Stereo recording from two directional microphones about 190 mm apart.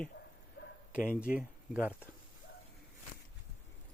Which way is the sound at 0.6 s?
65° left (ahead or behind).